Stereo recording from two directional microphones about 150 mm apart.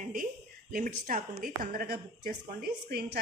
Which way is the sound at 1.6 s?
80° right.